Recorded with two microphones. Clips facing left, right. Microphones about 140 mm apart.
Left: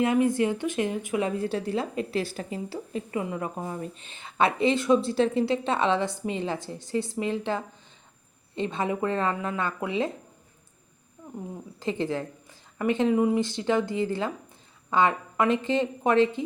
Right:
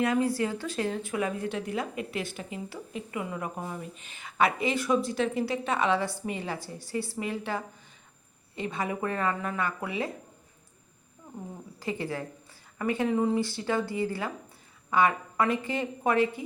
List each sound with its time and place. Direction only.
0.0 s speech: 20° left (ahead or behind)
11.8 s speech: 20° left (ahead or behind)